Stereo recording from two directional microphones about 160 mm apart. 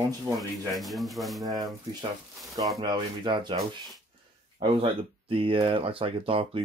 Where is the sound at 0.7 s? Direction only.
Centre (ahead or behind).